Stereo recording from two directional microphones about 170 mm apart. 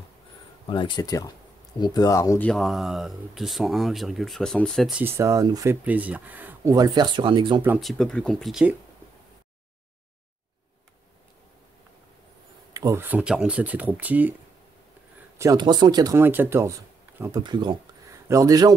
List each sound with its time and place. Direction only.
0.7 s speech: 25° left (ahead or behind)
2.5 s speech: centre (ahead or behind)
5.0 s speech: 15° right (ahead or behind)
7.8 s speech: centre (ahead or behind)
12.7 s speech: 20° right (ahead or behind)
15.3 s speech: 20° right (ahead or behind)